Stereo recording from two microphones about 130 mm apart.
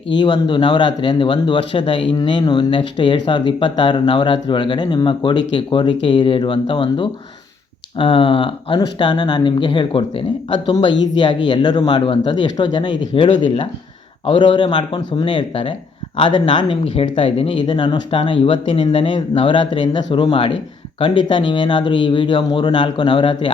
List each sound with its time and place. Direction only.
0.2 s speech: 40° left (ahead or behind)